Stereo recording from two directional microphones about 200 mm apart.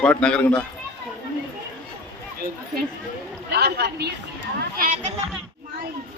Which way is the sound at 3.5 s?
55° right (ahead or behind).